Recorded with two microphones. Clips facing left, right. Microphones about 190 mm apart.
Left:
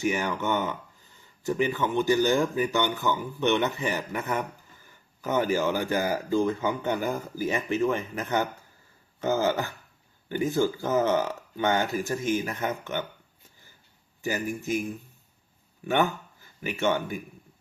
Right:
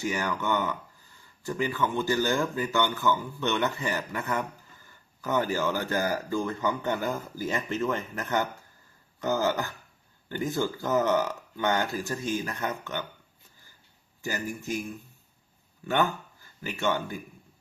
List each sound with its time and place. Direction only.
0.0 s speech: 15° left (ahead or behind)
14.2 s speech: 20° left (ahead or behind)